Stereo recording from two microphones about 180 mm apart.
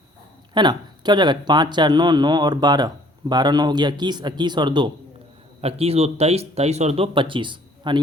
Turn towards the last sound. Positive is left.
turn(degrees=-25)  # may be behind; listen again after turning